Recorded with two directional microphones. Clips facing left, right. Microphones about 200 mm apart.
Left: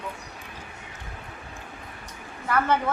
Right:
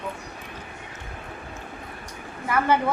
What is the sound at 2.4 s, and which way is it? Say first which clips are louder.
Speech: right 1 dB; 10° right (ahead or behind).